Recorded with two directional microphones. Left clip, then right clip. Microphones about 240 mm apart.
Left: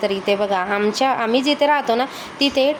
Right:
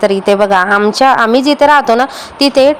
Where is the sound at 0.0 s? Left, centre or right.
Right.